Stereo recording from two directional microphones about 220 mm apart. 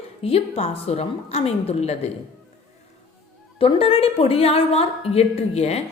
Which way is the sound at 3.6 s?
25° left (ahead or behind).